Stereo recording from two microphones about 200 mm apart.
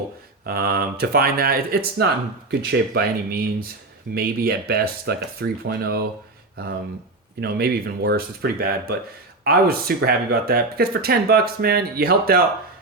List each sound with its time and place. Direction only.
0.4 s speech: 50° right (ahead or behind)
7.4 s speech: 50° right (ahead or behind)